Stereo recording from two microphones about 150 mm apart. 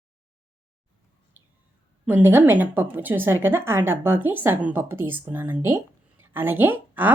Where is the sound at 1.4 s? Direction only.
15° right (ahead or behind).